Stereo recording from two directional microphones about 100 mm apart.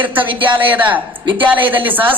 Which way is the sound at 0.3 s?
55° right (ahead or behind).